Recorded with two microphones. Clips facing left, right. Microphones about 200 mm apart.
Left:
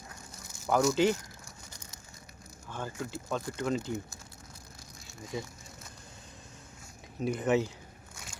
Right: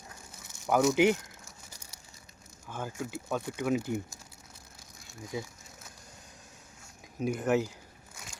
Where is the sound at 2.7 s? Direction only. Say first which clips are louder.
Right 1 dB; 10° right (ahead or behind).